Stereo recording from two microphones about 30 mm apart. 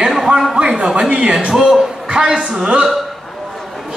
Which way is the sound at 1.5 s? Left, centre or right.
Right.